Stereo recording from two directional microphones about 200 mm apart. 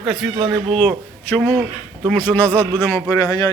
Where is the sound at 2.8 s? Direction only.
20° left (ahead or behind).